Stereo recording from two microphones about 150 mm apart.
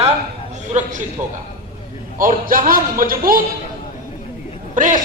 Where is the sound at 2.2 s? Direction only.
70° right (ahead or behind).